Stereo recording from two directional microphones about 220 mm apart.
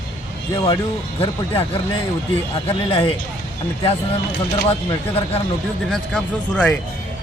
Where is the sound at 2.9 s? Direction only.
25° left (ahead or behind).